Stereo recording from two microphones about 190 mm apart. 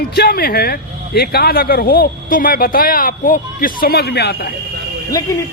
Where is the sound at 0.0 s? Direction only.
55° left (ahead or behind).